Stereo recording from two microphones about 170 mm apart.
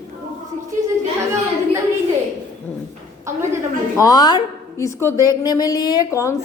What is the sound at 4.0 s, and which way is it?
A woman's voice, 20° left (ahead or behind).